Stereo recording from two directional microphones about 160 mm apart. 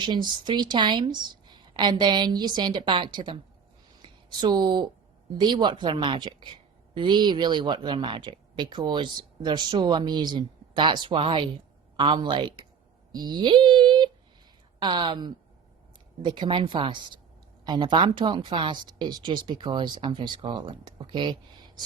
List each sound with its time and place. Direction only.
0.0 s a woman's voice: 30° right (ahead or behind)
13.1 s a sound: 25° right (ahead or behind)
14.8 s a woman's voice: 30° right (ahead or behind)